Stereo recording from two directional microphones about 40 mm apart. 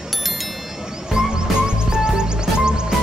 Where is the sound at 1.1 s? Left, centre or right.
Centre.